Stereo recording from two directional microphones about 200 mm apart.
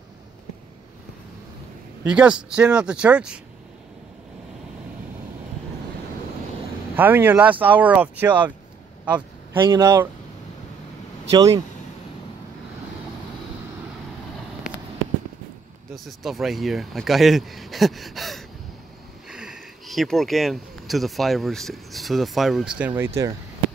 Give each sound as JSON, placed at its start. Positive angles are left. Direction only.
{"t": 2.0, "sound": "speech", "side_deg": -5}
{"t": 7.0, "sound": "speech", "side_deg": -10}
{"t": 9.0, "sound": "a sound", "side_deg": -5}
{"t": 9.6, "sound": "speech", "side_deg": -20}
{"t": 11.3, "sound": "speech", "side_deg": -15}
{"t": 15.9, "sound": "speech", "side_deg": 0}